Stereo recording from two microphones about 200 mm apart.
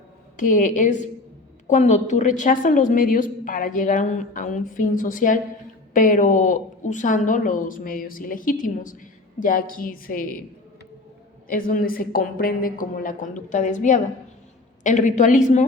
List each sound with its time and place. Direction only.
0.3 s a woman's voice: 40° left (ahead or behind)
11.4 s a woman's voice: 45° left (ahead or behind)